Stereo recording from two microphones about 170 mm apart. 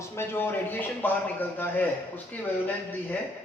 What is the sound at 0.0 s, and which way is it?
Speech, 15° left (ahead or behind).